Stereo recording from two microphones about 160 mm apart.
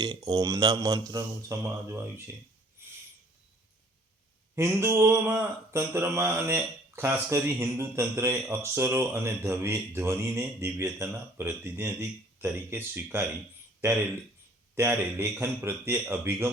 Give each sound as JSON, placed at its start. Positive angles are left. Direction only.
{"t": 0.0, "sound": "speech", "side_deg": -25}
{"t": 2.8, "sound": "a sound", "side_deg": -15}
{"t": 4.5, "sound": "speech", "side_deg": -15}
{"t": 14.8, "sound": "speech", "side_deg": -15}